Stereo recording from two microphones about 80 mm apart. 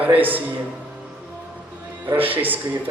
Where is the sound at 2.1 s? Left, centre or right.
Right.